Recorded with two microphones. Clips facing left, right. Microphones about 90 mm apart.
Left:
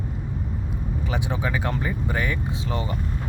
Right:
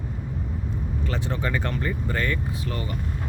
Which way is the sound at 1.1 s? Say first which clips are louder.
Left 1 dB; 15° left (ahead or behind).